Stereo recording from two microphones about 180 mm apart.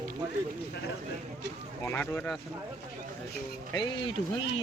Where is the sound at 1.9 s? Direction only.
10° left (ahead or behind).